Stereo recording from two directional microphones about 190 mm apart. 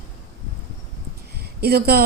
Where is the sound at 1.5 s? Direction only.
55° right (ahead or behind).